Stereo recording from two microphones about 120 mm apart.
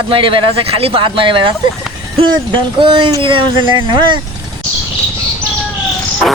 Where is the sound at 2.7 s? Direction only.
45° right (ahead or behind).